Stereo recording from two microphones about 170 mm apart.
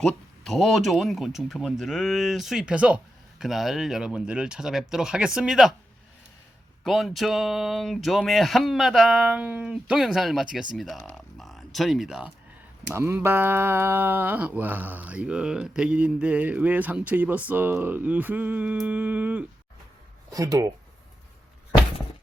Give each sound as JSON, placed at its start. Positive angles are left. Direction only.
{"t": 0.0, "sound": "speech", "side_deg": 5}
{"t": 6.8, "sound": "speech", "side_deg": 0}
{"t": 12.9, "sound": "speech", "side_deg": -15}
{"t": 20.3, "sound": "speech", "side_deg": -20}